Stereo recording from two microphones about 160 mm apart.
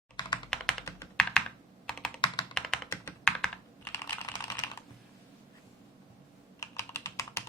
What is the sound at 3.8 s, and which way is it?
Computer keyboard, 15° left (ahead or behind).